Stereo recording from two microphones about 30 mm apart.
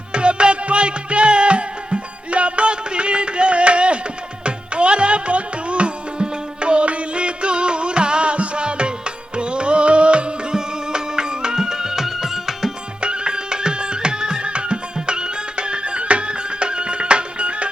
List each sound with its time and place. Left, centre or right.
0.1 s music: right
10.5 s music: right
13.0 s music: right